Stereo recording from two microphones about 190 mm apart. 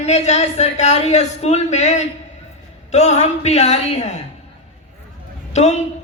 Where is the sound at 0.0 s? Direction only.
35° left (ahead or behind).